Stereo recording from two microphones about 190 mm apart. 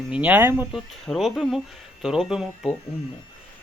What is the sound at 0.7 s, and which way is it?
Speech, centre (ahead or behind).